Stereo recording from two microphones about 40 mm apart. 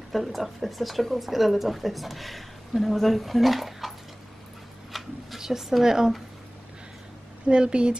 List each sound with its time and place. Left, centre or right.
0.1 s speech: centre
4.9 s a sound: centre
5.4 s a woman's voice: centre
7.4 s a woman's voice: right